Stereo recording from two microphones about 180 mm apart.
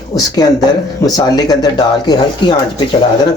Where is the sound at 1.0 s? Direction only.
20° left (ahead or behind).